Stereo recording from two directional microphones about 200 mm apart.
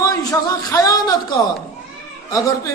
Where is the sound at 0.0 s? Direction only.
15° left (ahead or behind).